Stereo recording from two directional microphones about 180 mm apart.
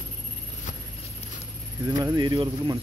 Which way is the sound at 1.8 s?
20° right (ahead or behind).